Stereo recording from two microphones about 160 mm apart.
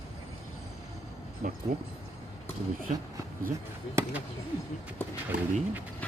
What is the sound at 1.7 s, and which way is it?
Speech, 70° right (ahead or behind).